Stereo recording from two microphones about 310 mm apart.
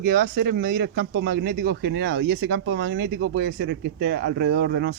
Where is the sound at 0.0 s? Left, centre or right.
Right.